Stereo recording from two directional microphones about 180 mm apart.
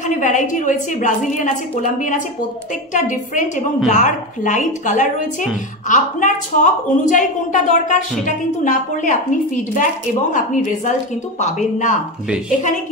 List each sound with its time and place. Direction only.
0.0 s a woman's voice: 45° left (ahead or behind)